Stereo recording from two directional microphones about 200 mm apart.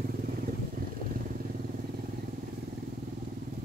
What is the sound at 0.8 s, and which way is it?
Vehicle, 45° right (ahead or behind).